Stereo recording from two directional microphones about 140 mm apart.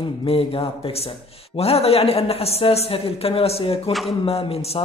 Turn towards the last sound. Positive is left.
turn(degrees=45)  # may be behind; listen again after turning